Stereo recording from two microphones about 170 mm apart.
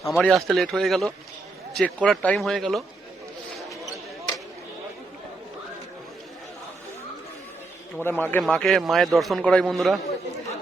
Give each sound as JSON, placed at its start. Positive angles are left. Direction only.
{"t": 0.0, "sound": "speech", "side_deg": 15}
{"t": 0.3, "sound": "a man's voice", "side_deg": 0}
{"t": 8.0, "sound": "a man's voice", "side_deg": 10}